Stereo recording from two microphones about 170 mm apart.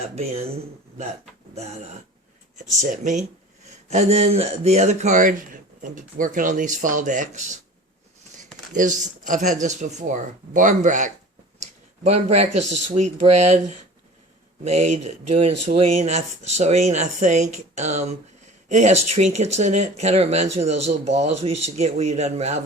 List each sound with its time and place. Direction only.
0.2 s speech: 40° right (ahead or behind)
1.5 s speech: 40° right (ahead or behind)
2.7 s speech: 50° right (ahead or behind)
8.7 s speech: 50° right (ahead or behind)
11.6 s a sound: 40° right (ahead or behind)
12.9 s speech: 45° right (ahead or behind)